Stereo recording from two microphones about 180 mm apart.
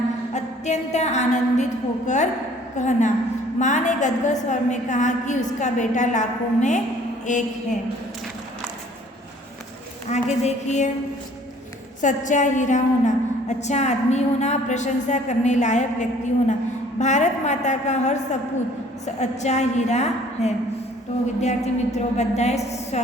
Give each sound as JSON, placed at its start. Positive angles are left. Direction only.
{"t": 0.3, "sound": "a woman's voice", "side_deg": 40}
{"t": 10.1, "sound": "a woman's voice", "side_deg": 40}
{"t": 12.0, "sound": "a woman's voice", "side_deg": 45}